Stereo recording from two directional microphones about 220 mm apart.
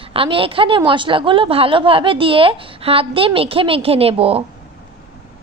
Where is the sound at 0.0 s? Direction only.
25° right (ahead or behind).